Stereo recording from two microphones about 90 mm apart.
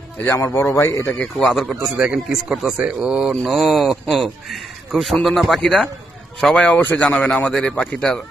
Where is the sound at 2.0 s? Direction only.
10° right (ahead or behind).